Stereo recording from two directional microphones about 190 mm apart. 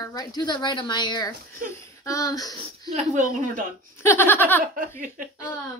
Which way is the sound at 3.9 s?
10° left (ahead or behind).